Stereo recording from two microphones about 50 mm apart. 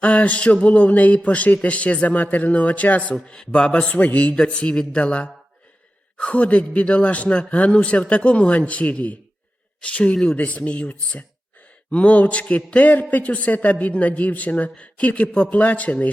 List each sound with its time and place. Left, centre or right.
0.0 s a man's voice: left
3.2 s a man's voice: centre